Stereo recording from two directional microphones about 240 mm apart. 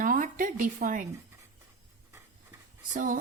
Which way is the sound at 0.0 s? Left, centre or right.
Right.